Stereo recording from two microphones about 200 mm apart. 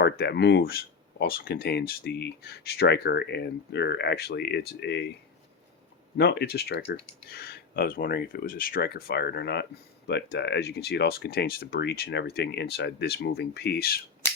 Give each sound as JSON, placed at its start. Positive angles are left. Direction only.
{"t": 0.0, "sound": "speech", "side_deg": 55}
{"t": 6.1, "sound": "speech", "side_deg": 55}